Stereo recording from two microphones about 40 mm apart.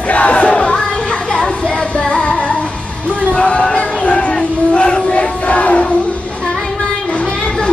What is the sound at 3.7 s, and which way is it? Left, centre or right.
Crowd, left.